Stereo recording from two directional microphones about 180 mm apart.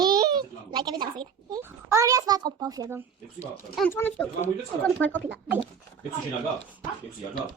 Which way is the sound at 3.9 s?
10° left (ahead or behind).